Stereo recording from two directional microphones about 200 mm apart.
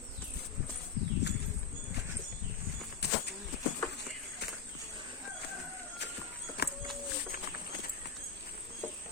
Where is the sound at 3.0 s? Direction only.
55° left (ahead or behind).